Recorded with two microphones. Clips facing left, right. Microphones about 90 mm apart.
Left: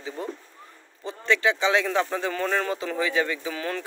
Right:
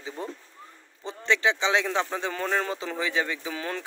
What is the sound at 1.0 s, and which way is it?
Speech, 25° right (ahead or behind).